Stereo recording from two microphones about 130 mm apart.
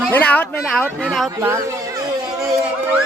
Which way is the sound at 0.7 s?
Centre (ahead or behind).